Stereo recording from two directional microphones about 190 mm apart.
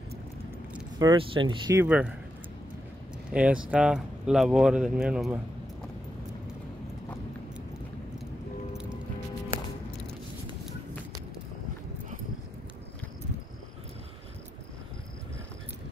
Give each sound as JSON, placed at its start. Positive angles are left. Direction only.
{"t": 0.9, "sound": "speech", "side_deg": -25}
{"t": 1.8, "sound": "speech", "side_deg": -5}
{"t": 3.3, "sound": "speech", "side_deg": -5}